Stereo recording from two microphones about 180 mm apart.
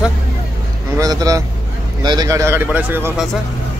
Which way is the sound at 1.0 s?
20° right (ahead or behind).